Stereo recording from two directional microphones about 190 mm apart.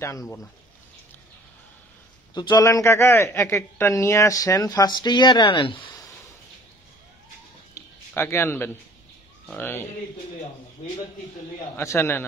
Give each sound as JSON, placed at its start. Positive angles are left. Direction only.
{"t": 0.0, "sound": "speech", "side_deg": 15}
{"t": 2.3, "sound": "speech", "side_deg": 20}
{"t": 7.7, "sound": "a sound", "side_deg": 10}
{"t": 9.5, "sound": "speech", "side_deg": 10}
{"t": 11.7, "sound": "speech", "side_deg": 15}